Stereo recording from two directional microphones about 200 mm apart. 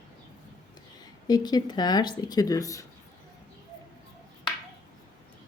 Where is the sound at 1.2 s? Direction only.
20° left (ahead or behind).